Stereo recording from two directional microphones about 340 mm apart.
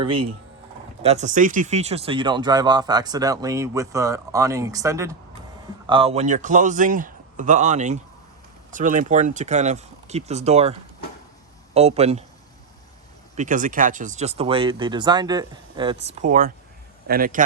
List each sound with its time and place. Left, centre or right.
0.1 s speech: right
1.0 s a man's voice: centre
13.3 s a man's voice: right